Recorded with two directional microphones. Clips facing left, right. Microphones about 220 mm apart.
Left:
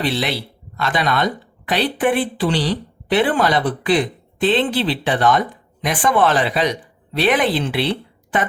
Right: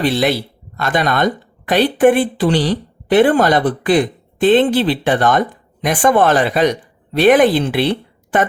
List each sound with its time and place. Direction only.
0.0 s a woman's voice: 45° right (ahead or behind)